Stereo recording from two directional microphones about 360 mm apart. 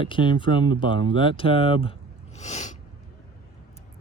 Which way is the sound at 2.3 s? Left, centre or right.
Centre.